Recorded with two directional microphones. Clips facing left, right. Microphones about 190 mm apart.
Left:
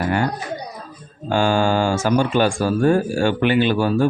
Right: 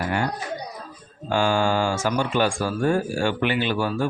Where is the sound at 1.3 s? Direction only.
30° left (ahead or behind).